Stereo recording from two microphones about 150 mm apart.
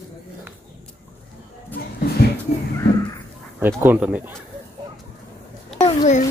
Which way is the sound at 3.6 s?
15° right (ahead or behind).